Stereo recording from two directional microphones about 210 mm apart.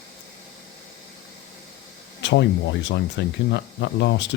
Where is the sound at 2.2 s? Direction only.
60° left (ahead or behind).